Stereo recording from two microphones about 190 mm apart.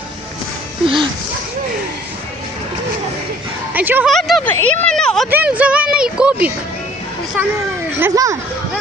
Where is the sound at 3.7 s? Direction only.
10° right (ahead or behind).